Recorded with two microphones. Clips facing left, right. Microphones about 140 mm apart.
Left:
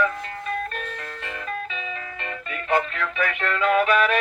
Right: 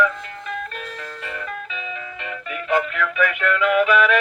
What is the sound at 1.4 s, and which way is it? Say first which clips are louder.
Music: even; 30° left (ahead or behind).